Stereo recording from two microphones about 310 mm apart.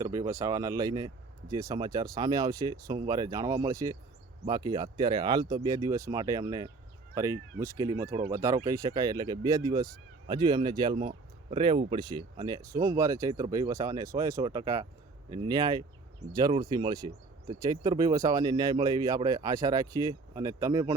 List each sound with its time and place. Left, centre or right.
0.0 s speech: centre